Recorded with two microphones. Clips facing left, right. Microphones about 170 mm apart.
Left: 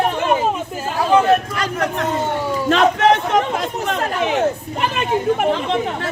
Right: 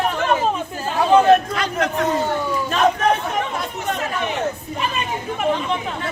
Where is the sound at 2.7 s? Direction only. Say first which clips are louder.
Left 4 dB; 90° left.